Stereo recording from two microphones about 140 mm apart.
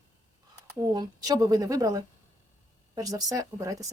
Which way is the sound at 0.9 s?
25° right (ahead or behind).